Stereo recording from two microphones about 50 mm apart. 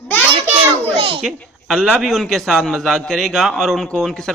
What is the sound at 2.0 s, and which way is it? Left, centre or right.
Speech, centre.